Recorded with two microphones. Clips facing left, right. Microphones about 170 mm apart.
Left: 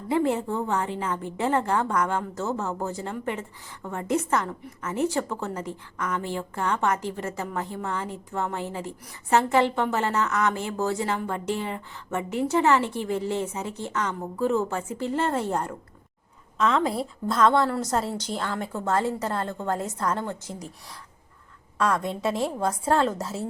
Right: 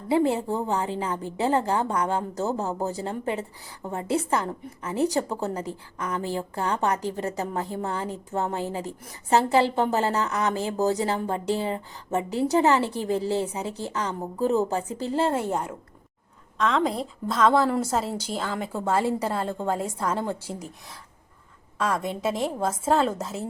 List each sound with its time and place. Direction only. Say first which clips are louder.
0.9 s a woman's voice: right 1 dB; 35° right (ahead or behind)
15.3 s a woman's voice: even; 5° right (ahead or behind)
21.8 s a woman's voice: left 1 dB; centre (ahead or behind)